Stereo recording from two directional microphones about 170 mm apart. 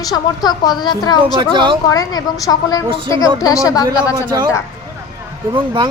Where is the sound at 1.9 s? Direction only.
20° left (ahead or behind).